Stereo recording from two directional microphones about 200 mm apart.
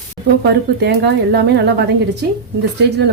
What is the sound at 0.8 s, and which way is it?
A woman's voice, 55° right (ahead or behind).